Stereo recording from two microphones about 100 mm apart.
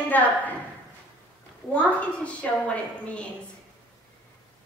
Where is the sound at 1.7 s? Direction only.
15° left (ahead or behind).